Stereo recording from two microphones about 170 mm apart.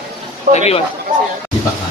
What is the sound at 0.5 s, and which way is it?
Speech, 40° left (ahead or behind).